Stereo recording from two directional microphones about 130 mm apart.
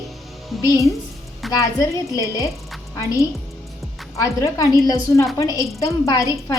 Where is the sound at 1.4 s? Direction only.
Centre (ahead or behind).